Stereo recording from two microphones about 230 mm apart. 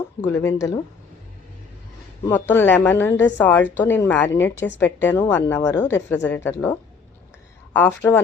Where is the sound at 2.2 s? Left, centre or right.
Centre.